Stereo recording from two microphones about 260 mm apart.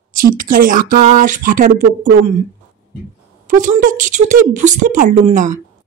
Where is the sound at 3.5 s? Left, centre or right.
Right.